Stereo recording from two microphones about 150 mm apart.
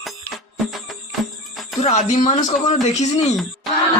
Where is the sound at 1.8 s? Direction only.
50° left (ahead or behind).